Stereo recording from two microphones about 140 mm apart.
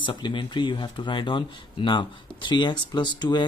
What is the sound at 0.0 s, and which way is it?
Speech, 35° left (ahead or behind).